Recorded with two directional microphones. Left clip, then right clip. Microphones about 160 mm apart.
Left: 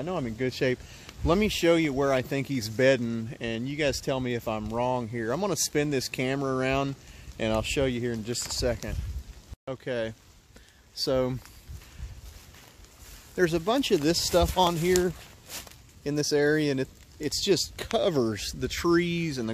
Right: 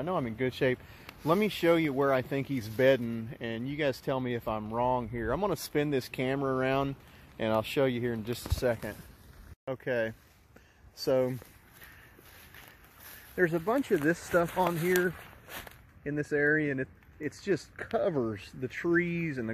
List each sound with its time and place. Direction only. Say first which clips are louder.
0.0 s speech: left 1 dB; 15° left (ahead or behind)
11.1 s speech: left 1 dB; 35° left (ahead or behind)
13.4 s speech: left 3 dB; 20° left (ahead or behind)
16.2 s speech: left 3 dB; 15° left (ahead or behind)